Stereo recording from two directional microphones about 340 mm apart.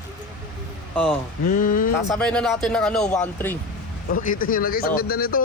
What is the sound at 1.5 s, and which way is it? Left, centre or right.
Speech, left.